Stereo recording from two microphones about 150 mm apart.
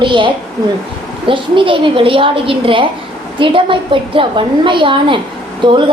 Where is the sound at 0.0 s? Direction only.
35° right (ahead or behind).